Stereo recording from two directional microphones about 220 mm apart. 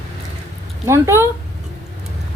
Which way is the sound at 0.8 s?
10° right (ahead or behind).